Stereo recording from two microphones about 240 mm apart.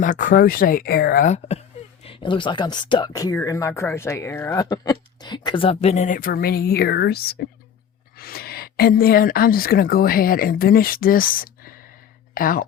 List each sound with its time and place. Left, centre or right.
0.0 s speech: left